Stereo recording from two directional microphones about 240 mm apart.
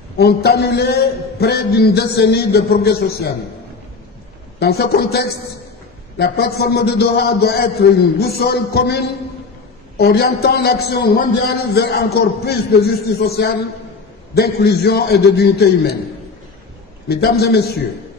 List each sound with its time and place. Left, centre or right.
0.2 s a man's voice: left
4.6 s a man's voice: left
17.1 s a man's voice: left